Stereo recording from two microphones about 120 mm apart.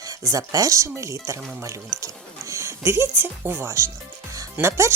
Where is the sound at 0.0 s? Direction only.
30° right (ahead or behind).